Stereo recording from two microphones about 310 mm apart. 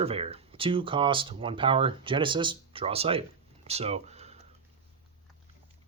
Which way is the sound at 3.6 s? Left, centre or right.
Centre.